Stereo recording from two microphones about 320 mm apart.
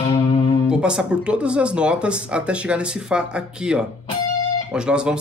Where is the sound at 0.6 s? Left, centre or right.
Centre.